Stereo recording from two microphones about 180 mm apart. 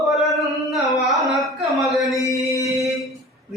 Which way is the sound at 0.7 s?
Centre (ahead or behind).